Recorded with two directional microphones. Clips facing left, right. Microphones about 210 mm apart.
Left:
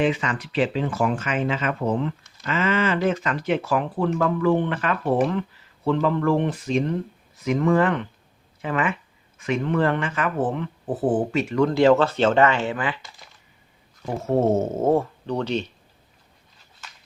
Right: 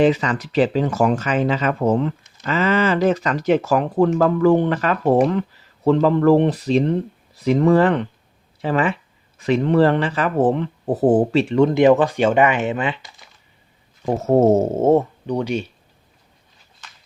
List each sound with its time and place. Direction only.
0.0 s speech: 40° right (ahead or behind)
14.2 s speech: 40° right (ahead or behind); by 15.0 s 25° right (ahead or behind)
15.3 s speech: 10° right (ahead or behind)